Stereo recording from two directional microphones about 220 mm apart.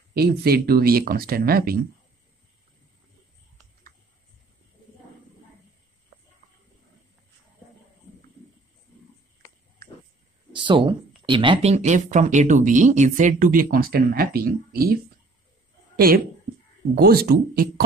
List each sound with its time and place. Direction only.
0.1 s speech: 45° right (ahead or behind)
10.5 s speech: 20° right (ahead or behind); by 15.0 s 45° right (ahead or behind)
16.9 s speech: 45° right (ahead or behind)